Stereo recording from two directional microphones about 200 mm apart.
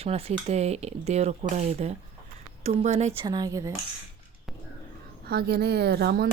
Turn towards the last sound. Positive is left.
turn(degrees=-55)  # may be behind; listen again after turning